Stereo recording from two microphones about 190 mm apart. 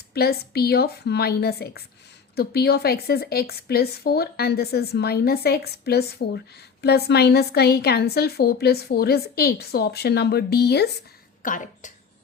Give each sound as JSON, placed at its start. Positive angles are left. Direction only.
{"t": 0.1, "sound": "a woman's voice", "side_deg": 55}
{"t": 11.4, "sound": "speech", "side_deg": 45}